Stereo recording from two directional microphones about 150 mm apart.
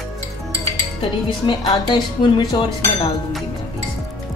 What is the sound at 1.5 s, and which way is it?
A woman's voice, 30° left (ahead or behind).